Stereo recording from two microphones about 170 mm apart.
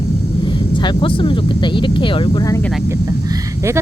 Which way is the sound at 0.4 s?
25° left (ahead or behind).